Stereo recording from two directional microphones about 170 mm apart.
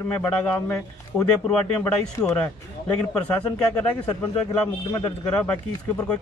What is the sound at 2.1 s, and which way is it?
Speech, 20° left (ahead or behind).